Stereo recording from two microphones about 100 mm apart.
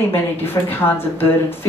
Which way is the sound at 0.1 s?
20° left (ahead or behind).